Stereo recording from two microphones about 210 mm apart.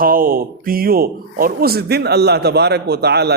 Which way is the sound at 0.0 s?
45° right (ahead or behind).